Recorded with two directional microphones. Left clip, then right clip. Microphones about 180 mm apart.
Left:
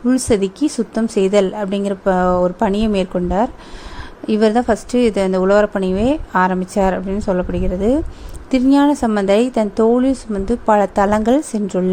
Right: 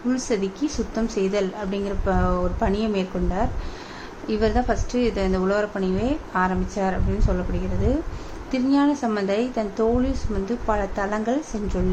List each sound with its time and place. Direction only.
0.1 s a woman's voice: 55° left (ahead or behind)
8.4 s a woman's voice: 50° left (ahead or behind)